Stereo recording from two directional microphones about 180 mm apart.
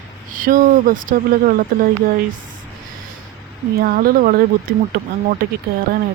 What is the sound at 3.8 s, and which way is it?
Speech, 55° right (ahead or behind).